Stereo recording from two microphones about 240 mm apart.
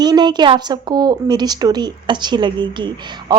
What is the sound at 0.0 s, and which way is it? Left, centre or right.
A woman's voice, centre.